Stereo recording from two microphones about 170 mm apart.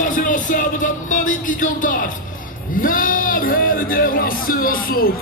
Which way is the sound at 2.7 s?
55° left (ahead or behind).